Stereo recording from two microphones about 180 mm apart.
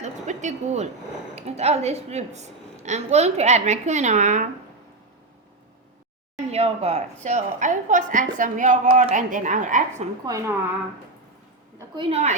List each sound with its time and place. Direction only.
0.0 s a sound: 40° right (ahead or behind)
1.4 s a woman's voice: 35° right (ahead or behind)
6.3 s a woman's voice: 35° right (ahead or behind)
10.2 s a woman's voice: 20° right (ahead or behind)
11.9 s a woman's voice: 35° right (ahead or behind)